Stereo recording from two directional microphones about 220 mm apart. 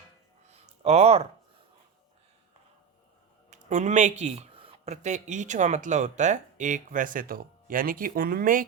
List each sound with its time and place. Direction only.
0.6 s speech: 30° right (ahead or behind)
3.5 s speech: 35° right (ahead or behind)